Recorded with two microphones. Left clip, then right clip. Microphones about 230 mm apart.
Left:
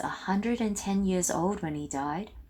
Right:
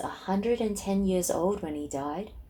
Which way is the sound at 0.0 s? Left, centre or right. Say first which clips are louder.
Right 1 dB; left.